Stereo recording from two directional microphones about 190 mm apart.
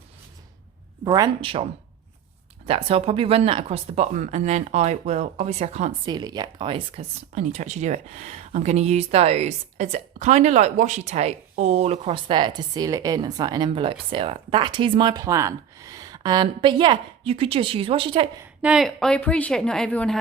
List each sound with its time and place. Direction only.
1.0 s speech: 20° right (ahead or behind)
2.6 s speech: 30° right (ahead or behind)
6.1 s speech: 20° right (ahead or behind)
18.6 s a woman's voice: 5° right (ahead or behind)